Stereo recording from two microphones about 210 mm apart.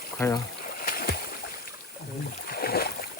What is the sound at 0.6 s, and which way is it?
Boat, 45° left (ahead or behind).